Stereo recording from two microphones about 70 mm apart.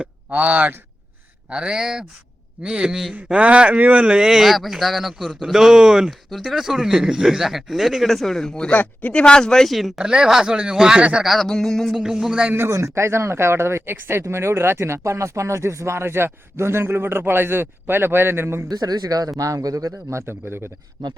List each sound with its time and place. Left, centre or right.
0.0 s speech: centre
8.7 s speech: left; by 10.0 s centre
10.0 s speech: centre
11.2 s speech: centre
11.9 s speech: centre
12.5 s speech: right
18.7 s a man's voice: right